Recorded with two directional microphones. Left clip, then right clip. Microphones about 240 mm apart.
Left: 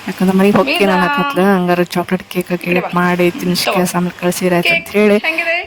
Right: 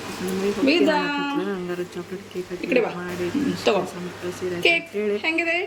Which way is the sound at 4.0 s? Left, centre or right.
Left.